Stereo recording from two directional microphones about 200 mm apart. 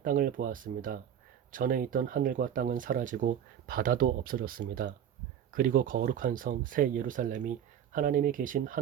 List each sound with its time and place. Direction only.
0.0 s speech: 45° right (ahead or behind)